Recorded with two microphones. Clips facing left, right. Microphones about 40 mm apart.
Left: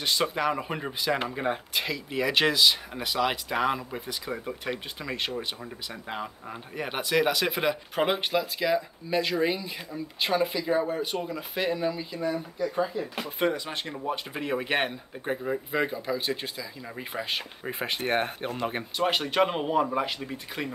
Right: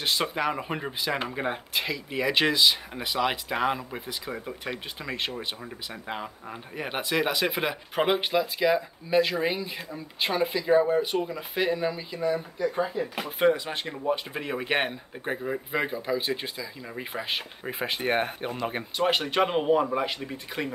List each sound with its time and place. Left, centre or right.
0.3 s speech: centre
12.8 s speech: right
13.4 s speech: centre